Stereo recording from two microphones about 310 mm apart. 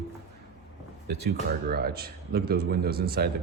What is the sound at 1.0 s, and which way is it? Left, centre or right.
Speech, right.